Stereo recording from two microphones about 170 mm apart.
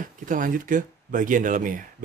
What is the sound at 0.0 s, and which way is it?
Speech, 50° right (ahead or behind).